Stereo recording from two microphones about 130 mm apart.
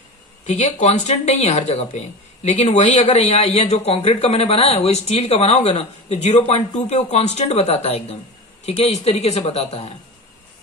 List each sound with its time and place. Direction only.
0.5 s speech: 60° left (ahead or behind)